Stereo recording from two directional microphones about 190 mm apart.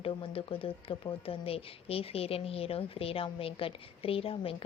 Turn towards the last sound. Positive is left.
turn(degrees=30)  # may be behind; listen again after turning